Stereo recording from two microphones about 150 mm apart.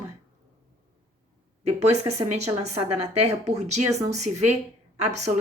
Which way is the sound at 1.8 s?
45° right (ahead or behind).